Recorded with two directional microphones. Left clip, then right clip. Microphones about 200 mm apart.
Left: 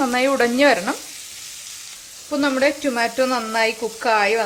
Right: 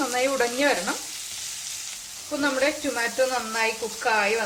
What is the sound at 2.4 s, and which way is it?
Frying, 50° left (ahead or behind).